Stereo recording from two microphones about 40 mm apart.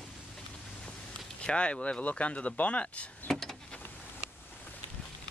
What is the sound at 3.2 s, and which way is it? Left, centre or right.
Vehicle, centre.